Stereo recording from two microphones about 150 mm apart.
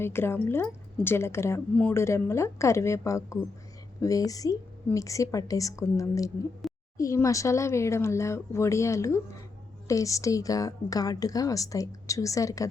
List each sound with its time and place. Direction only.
0.0 s a woman's voice: 15° left (ahead or behind)